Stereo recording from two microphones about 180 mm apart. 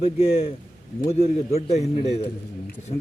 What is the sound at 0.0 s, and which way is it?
A man's voice, 35° left (ahead or behind).